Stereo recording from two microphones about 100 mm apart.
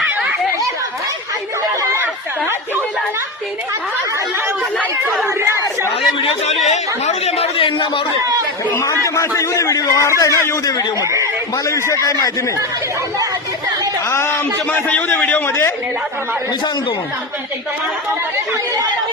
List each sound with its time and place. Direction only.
5.2 s chatter: 25° right (ahead or behind)
6.7 s a sound: 90° left; by 8.0 s 60° left (ahead or behind)
8.7 s a man's voice: 30° left (ahead or behind)
11.0 s a man's voice: 30° right (ahead or behind)
11.5 s a man's voice: 35° left (ahead or behind)
14.1 s a man's voice: 25° left (ahead or behind)